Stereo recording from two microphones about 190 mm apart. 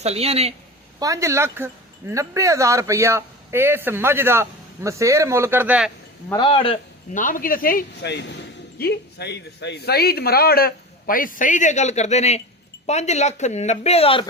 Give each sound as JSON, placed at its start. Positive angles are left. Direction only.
{"t": 0.0, "sound": "speech", "side_deg": -35}
{"t": 0.9, "sound": "speech", "side_deg": -20}
{"t": 6.2, "sound": "speech", "side_deg": 25}
{"t": 7.1, "sound": "speech", "side_deg": 45}